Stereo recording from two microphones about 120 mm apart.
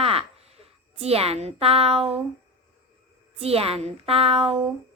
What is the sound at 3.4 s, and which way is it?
A woman's voice, 55° right (ahead or behind).